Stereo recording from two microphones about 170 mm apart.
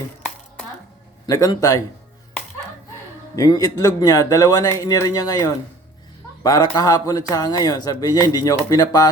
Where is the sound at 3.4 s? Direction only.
20° left (ahead or behind).